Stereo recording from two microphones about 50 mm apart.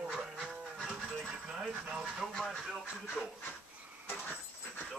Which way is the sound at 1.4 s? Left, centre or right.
Centre.